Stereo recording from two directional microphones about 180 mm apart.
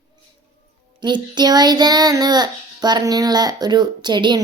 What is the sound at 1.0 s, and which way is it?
A child's voice, 25° right (ahead or behind).